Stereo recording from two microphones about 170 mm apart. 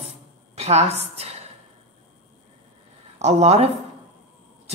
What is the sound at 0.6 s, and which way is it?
Speech, 40° right (ahead or behind).